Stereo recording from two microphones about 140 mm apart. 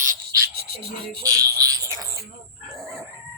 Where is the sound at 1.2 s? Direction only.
25° right (ahead or behind).